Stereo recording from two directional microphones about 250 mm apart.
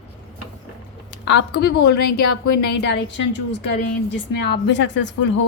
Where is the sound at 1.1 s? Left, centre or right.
Left.